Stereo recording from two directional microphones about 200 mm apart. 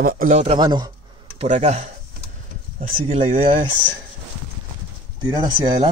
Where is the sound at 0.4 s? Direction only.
30° right (ahead or behind).